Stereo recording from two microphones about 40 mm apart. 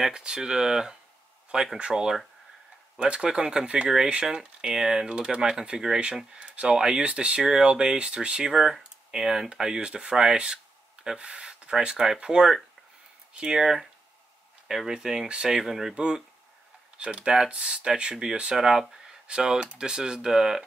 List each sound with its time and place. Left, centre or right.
0.1 s speech: centre
8.5 s speech: centre
9.8 s speech: right
14.9 s speech: centre
15.6 s speech: centre
15.9 s speech: right
17.5 s speech: right
18.6 s speech: centre
19.2 s speech: centre